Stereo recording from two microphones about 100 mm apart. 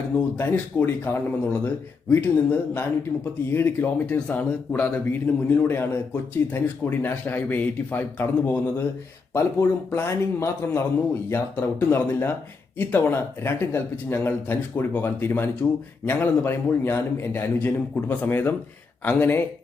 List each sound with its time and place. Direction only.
0.3 s speech: 20° left (ahead or behind)